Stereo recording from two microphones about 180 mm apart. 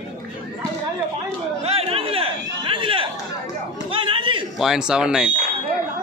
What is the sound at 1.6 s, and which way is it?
Chatter, 35° right (ahead or behind).